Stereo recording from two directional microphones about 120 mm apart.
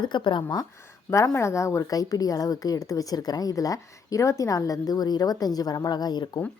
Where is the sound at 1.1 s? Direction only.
25° left (ahead or behind).